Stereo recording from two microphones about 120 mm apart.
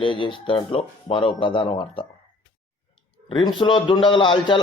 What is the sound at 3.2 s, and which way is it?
A man's voice, 40° left (ahead or behind).